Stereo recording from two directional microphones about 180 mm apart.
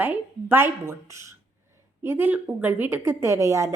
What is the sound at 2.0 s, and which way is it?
A woman's voice, 15° right (ahead or behind).